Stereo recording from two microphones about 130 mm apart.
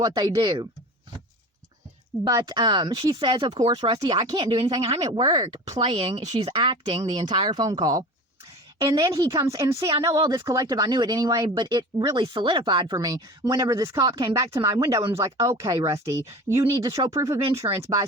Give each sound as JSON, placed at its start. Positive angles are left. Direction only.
{"t": 0.0, "sound": "speech", "side_deg": -30}
{"t": 2.2, "sound": "speech", "side_deg": -30}
{"t": 4.4, "sound": "speech", "side_deg": -45}
{"t": 5.1, "sound": "speech", "side_deg": -35}
{"t": 5.8, "sound": "speech", "side_deg": -45}